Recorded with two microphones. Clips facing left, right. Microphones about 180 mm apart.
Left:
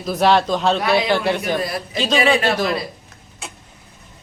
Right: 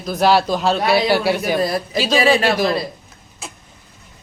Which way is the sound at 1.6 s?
35° right (ahead or behind).